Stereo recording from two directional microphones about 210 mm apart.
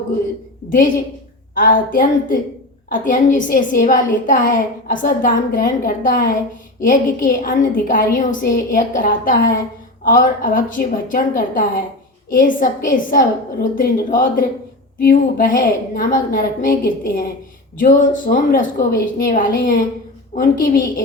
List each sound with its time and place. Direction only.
1.5 s a woman's voice: 40° left (ahead or behind)